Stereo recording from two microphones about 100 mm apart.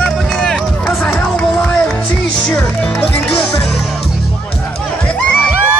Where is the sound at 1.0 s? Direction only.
10° left (ahead or behind).